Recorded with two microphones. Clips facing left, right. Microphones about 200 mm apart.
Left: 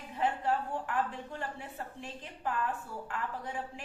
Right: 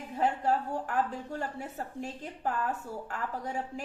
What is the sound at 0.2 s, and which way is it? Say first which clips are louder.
A woman's voice: right 3 dB; 40° right (ahead or behind).